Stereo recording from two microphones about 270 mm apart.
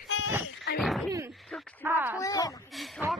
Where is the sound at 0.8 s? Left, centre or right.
Centre.